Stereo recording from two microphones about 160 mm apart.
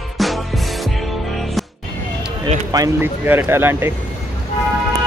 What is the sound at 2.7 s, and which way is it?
Speech, 20° right (ahead or behind).